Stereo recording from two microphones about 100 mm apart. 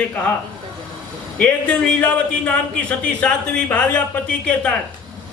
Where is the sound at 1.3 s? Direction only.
10° left (ahead or behind).